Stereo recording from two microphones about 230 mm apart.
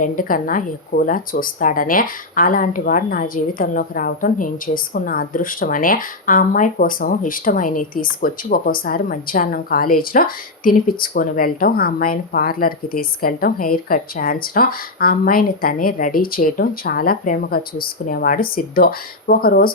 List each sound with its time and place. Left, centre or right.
0.0 s speech: left